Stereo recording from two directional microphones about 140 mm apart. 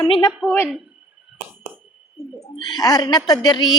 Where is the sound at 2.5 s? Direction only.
30° left (ahead or behind).